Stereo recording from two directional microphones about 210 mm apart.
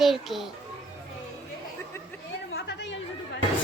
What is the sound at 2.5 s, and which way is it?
Chatter, 55° left (ahead or behind).